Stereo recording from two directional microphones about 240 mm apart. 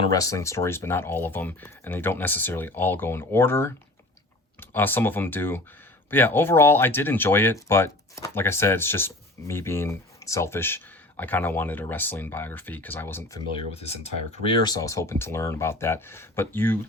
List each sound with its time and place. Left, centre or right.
0.0 s speech: centre
13.7 s speech: left
14.6 s speech: centre